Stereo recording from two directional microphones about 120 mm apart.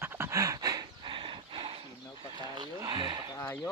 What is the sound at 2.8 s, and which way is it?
Speech, 40° right (ahead or behind).